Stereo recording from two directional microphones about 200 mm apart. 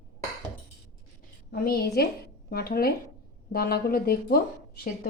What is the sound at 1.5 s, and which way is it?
Speech, 50° left (ahead or behind).